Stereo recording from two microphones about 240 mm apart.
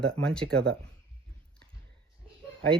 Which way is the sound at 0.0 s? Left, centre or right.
Centre.